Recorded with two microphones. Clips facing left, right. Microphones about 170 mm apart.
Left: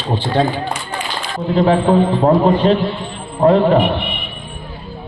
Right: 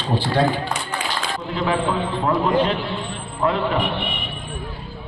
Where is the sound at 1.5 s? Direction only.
40° left (ahead or behind).